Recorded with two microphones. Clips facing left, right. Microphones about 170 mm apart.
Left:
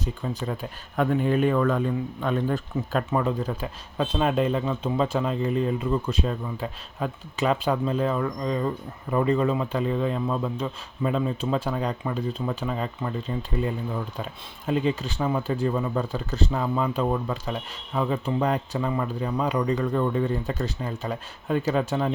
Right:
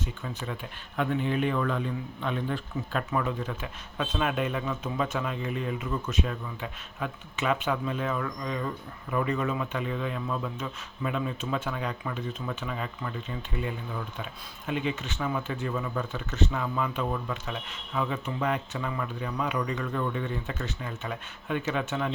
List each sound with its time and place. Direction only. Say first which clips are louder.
0.0 s speech: left 6 dB; 35° left (ahead or behind)